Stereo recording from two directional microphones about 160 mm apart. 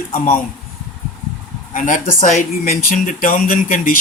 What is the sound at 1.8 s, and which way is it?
Speech, 55° left (ahead or behind).